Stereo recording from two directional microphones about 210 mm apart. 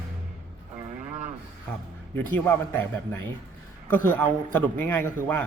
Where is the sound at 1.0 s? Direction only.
35° right (ahead or behind).